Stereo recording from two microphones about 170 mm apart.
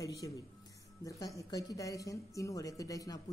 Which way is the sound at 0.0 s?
20° left (ahead or behind).